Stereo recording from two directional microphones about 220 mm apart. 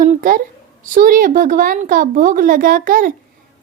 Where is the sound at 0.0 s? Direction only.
40° right (ahead or behind).